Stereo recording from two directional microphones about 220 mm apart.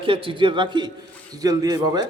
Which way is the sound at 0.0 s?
25° right (ahead or behind).